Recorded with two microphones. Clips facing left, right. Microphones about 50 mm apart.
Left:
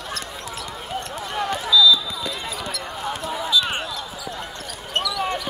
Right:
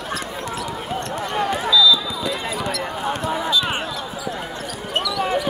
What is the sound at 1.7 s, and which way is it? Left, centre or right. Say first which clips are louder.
Basketball bounce: even; centre.